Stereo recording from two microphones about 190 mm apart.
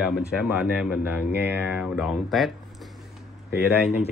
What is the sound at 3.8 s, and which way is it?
Speech, 35° left (ahead or behind).